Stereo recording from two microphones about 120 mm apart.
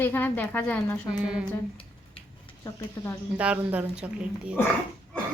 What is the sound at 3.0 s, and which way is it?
Speech, 35° left (ahead or behind).